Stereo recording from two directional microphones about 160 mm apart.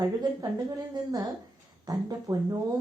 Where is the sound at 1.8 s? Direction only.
25° right (ahead or behind).